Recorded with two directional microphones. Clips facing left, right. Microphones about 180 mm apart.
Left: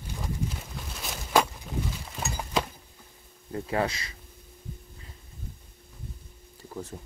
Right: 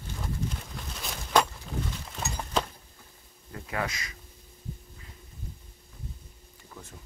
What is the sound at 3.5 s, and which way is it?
Speech, 30° left (ahead or behind).